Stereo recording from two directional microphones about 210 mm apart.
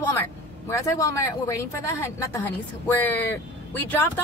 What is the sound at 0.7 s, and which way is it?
Speech, 15° left (ahead or behind).